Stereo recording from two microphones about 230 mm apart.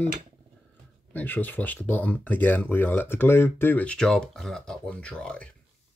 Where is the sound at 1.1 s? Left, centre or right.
Centre.